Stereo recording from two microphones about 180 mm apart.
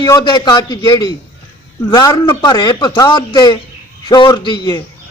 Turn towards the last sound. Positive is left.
turn(degrees=25)  # may be behind; listen again after turning